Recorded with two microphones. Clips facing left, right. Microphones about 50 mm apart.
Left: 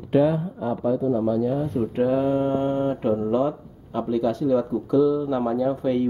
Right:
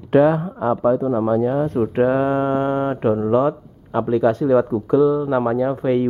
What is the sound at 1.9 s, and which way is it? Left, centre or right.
Speech, right.